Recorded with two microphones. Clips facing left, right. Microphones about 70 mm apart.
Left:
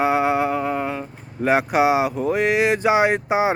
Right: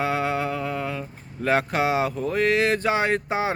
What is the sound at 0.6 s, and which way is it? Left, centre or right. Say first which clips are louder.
Speech: left 5 dB; left.